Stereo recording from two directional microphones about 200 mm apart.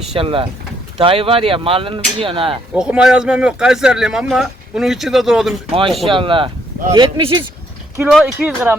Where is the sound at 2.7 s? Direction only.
5° right (ahead or behind).